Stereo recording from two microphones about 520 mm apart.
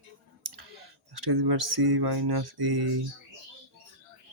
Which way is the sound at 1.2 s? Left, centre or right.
Right.